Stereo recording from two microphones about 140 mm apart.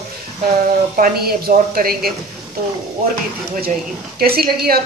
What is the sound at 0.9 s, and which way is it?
A woman's voice, 85° right.